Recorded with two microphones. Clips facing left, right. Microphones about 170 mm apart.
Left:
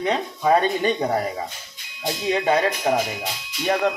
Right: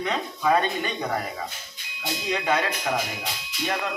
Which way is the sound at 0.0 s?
35° left (ahead or behind).